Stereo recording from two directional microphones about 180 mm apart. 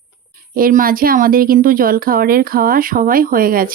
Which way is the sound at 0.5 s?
50° right (ahead or behind).